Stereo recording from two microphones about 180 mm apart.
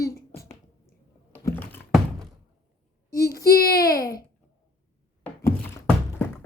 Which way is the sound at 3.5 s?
60° left (ahead or behind).